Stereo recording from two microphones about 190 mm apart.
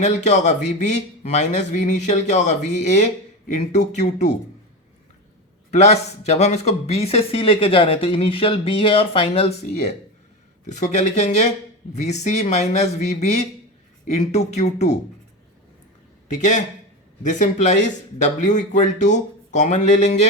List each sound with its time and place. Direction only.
0.0 s speech: 40° left (ahead or behind)
5.7 s speech: 35° left (ahead or behind)
16.3 s speech: 40° left (ahead or behind)